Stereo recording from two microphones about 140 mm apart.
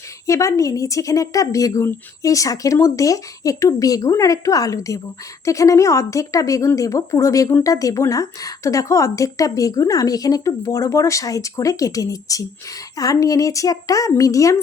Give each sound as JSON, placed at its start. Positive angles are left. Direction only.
{"t": 0.3, "sound": "speech", "side_deg": 20}